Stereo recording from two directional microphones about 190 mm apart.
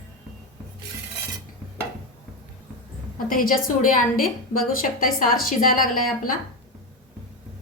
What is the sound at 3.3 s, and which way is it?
Speech, 45° left (ahead or behind).